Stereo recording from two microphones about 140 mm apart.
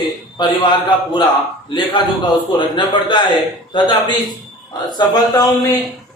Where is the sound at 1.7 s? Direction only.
35° left (ahead or behind).